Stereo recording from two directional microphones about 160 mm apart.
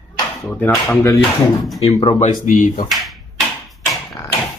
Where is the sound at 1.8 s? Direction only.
20° left (ahead or behind).